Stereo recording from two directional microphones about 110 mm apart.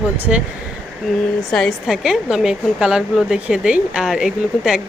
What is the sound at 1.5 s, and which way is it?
A woman's voice, centre (ahead or behind).